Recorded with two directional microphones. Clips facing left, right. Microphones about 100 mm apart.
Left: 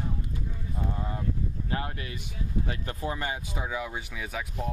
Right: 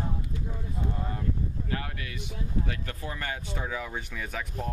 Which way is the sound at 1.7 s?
25° left (ahead or behind).